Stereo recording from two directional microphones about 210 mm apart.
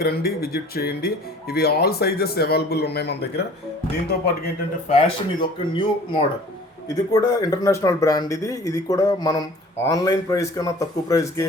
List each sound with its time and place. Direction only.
0.0 s speech: 45° left (ahead or behind)
4.9 s speech: 25° left (ahead or behind)